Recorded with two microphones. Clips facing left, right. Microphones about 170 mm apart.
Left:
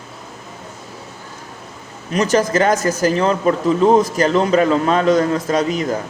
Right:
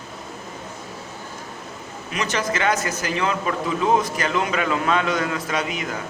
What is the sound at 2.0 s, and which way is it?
A man's voice, 40° left (ahead or behind).